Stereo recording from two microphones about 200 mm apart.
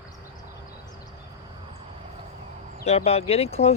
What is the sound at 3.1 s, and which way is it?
Speech, 30° left (ahead or behind).